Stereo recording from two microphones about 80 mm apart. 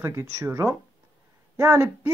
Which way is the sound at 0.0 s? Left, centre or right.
Right.